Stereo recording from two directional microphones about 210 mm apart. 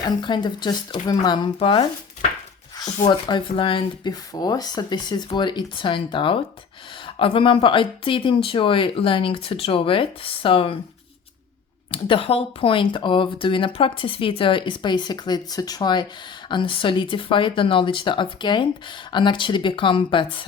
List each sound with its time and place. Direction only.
0.2 s speech: 20° left (ahead or behind)
11.9 s speech: 25° left (ahead or behind)